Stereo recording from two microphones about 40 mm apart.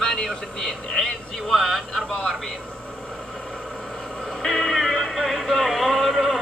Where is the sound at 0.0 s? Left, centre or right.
Centre.